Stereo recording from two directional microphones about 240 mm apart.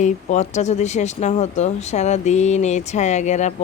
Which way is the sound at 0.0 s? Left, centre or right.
Left.